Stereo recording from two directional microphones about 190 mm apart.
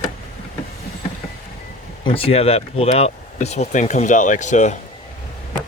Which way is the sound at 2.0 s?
30° left (ahead or behind).